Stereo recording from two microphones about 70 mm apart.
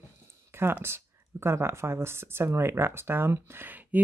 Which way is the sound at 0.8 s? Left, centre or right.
Right.